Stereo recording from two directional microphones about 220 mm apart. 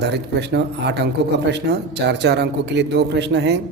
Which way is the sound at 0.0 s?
50° right (ahead or behind).